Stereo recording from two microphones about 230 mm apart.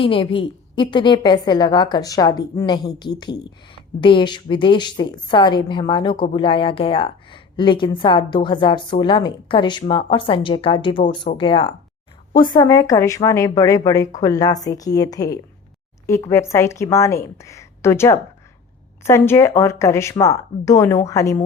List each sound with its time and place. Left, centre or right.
0.0 s a woman's voice: left